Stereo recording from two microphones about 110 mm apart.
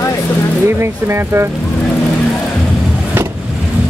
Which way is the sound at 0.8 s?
25° right (ahead or behind).